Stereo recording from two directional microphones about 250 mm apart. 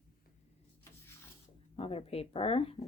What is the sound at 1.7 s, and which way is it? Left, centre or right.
Speech, left.